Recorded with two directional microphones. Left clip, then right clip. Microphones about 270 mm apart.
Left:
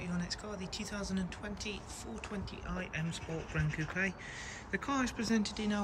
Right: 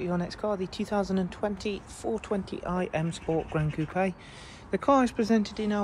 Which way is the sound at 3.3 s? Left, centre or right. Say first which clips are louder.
Right 16 dB; right.